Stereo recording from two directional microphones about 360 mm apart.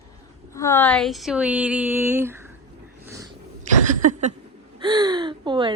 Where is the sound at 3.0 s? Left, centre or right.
Centre.